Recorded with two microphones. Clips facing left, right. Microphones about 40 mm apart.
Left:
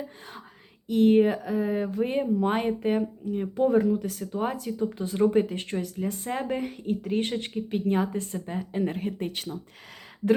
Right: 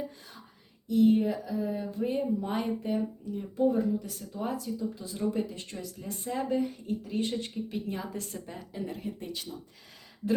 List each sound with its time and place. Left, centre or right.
0.9 s speech: left
3.6 s speech: left
8.1 s speech: left
8.7 s speech: left